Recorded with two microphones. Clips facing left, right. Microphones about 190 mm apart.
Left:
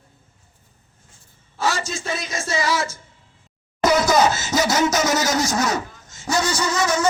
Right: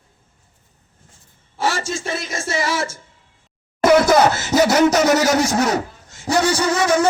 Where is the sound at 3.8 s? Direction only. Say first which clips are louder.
Right 4 dB; 55° right (ahead or behind).